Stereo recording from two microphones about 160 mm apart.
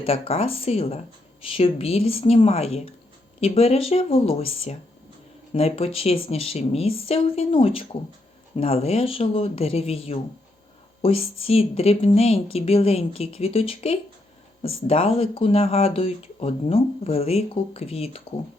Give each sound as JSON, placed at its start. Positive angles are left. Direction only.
{"t": 0.0, "sound": "speech", "side_deg": 40}